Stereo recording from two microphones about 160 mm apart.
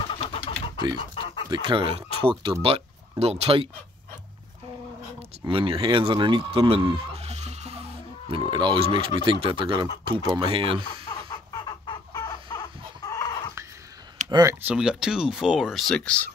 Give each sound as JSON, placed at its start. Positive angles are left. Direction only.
{"t": 0.1, "sound": "vehicle", "side_deg": 35}
{"t": 1.2, "sound": "chicken", "side_deg": 30}
{"t": 1.5, "sound": "speech", "side_deg": -30}
{"t": 5.4, "sound": "speech", "side_deg": -35}
{"t": 8.3, "sound": "speech", "side_deg": -30}
{"t": 11.1, "sound": "chicken", "side_deg": 25}
{"t": 14.3, "sound": "speech", "side_deg": -20}
{"t": 14.7, "sound": "speech", "side_deg": -5}